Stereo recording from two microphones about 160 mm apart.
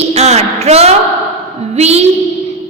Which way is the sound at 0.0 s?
40° right (ahead or behind).